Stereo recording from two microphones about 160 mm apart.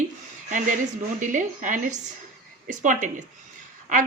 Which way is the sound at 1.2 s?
50° right (ahead or behind).